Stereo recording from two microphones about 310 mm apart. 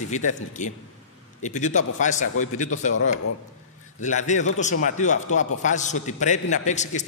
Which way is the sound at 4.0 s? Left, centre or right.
Left.